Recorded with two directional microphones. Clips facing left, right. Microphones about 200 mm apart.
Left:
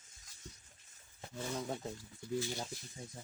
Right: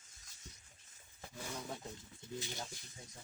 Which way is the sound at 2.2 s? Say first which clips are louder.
Left 8 dB; 25° right (ahead or behind).